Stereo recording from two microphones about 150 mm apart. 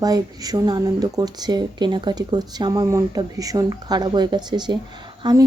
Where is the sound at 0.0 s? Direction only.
25° right (ahead or behind).